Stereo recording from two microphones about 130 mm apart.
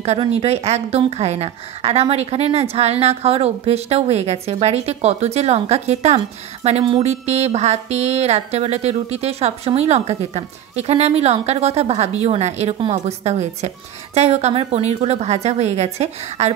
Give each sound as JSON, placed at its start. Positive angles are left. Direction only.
{"t": 0.2, "sound": "a woman's voice", "side_deg": -50}